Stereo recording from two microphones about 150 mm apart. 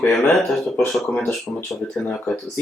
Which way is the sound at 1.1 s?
15° left (ahead or behind).